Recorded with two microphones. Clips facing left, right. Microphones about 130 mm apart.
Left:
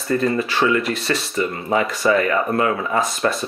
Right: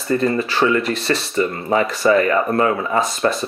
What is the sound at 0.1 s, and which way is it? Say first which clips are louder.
Speech: right 1 dB; 30° right (ahead or behind).